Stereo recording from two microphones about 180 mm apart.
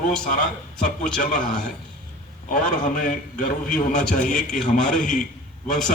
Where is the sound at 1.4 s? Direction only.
5° left (ahead or behind).